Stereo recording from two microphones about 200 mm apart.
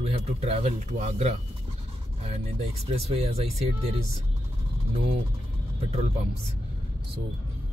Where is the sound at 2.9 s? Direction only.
30° right (ahead or behind).